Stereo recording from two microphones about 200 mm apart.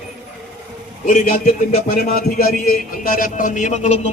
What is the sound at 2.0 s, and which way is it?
A man's voice, 50° left (ahead or behind).